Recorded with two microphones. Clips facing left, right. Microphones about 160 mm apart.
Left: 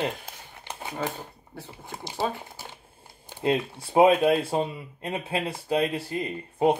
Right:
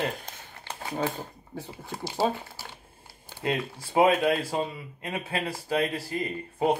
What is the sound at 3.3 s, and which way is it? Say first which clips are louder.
Speech: left 4 dB; 25° left (ahead or behind).